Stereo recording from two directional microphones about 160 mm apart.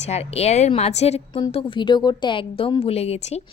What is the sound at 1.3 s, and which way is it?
A woman's voice, 30° left (ahead or behind).